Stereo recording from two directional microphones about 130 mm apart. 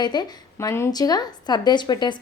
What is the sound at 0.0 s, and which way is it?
Speech, 35° left (ahead or behind).